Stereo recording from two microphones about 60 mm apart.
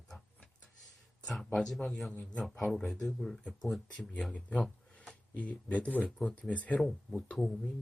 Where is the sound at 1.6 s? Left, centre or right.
Centre.